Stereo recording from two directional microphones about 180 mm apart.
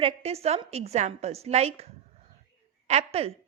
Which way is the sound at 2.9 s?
35° right (ahead or behind).